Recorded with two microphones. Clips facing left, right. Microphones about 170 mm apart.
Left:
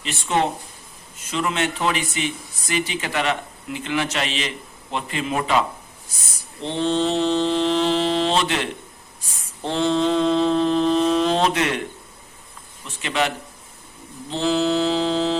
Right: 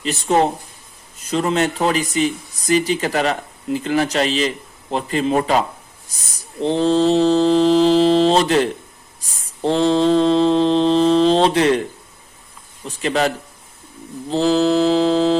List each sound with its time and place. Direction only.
0.0 s speech: 40° right (ahead or behind)
12.8 s speech: 40° right (ahead or behind)